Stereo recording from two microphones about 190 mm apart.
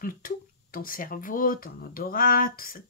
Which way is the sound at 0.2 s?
50° left (ahead or behind).